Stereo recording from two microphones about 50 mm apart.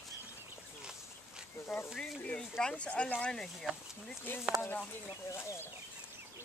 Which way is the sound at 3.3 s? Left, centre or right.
Centre.